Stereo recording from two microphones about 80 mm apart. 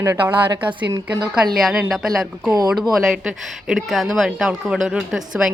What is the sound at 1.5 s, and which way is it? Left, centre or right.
A woman's voice, centre.